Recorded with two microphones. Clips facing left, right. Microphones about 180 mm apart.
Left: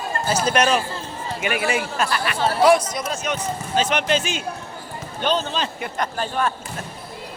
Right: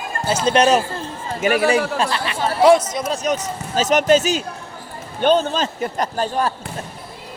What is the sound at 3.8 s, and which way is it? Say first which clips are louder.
Speech: right 7 dB; 40° right (ahead or behind).